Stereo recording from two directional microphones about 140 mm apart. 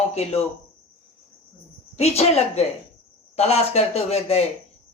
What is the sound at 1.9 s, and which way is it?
Speech, 50° left (ahead or behind).